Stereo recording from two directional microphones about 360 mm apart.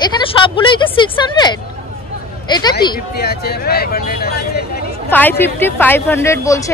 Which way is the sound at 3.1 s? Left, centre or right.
Left.